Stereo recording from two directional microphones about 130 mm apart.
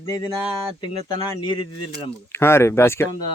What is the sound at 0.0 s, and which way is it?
Speech, 25° left (ahead or behind).